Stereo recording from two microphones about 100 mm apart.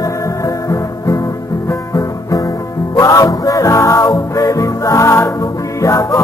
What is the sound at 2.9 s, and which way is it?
Music, 35° left (ahead or behind).